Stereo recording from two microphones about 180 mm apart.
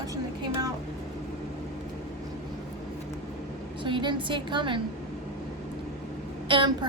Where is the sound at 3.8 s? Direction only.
25° right (ahead or behind).